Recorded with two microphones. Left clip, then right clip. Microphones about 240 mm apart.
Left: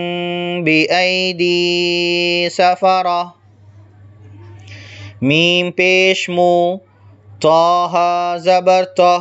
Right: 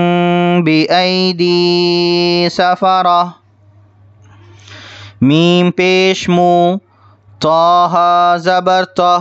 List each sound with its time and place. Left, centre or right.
0.0 s mantra: right
4.6 s mantra: right
7.3 s mantra: right